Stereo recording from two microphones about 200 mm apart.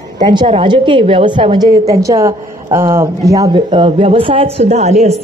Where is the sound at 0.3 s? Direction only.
25° right (ahead or behind).